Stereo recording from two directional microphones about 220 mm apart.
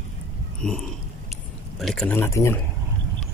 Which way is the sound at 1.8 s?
Centre (ahead or behind).